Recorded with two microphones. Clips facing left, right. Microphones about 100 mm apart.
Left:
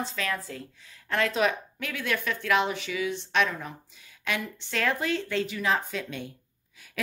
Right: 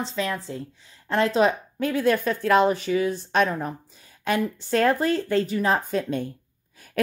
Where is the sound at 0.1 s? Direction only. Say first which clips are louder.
Right 4 dB; 25° right (ahead or behind); by 6.2 s 40° right (ahead or behind).